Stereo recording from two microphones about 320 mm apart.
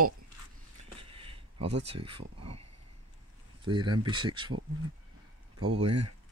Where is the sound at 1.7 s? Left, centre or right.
Centre.